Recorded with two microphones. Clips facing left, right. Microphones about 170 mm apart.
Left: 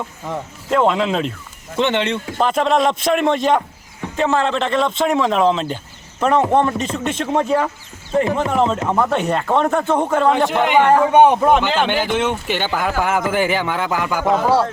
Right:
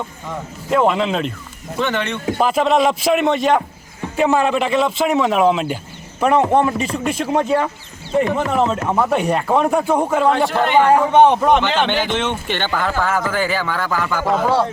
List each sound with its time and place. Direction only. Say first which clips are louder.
0.7 s a man's voice: even; 5° right (ahead or behind)
1.8 s a man's voice: left 3 dB; 25° left (ahead or behind)
2.4 s a man's voice: right 1 dB; 5° right (ahead or behind)
4.2 s a man's voice: right 2 dB; 15° right (ahead or behind)
10.3 s speech: even; 20° left (ahead or behind)